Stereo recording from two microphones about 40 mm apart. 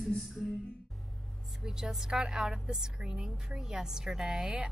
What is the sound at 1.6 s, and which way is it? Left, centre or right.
A woman's voice, centre.